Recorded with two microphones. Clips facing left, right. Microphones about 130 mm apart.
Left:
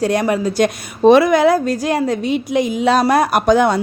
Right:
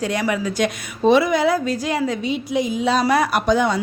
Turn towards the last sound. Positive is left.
turn(degrees=60)  # may be behind; listen again after turning